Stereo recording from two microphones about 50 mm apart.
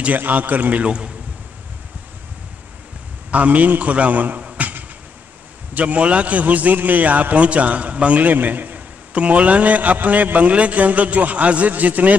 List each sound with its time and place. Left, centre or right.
0.0 s a man's voice: right
0.8 s a man's voice: right
3.3 s a man's voice: right
4.6 s a sound: right
5.8 s a man's voice: right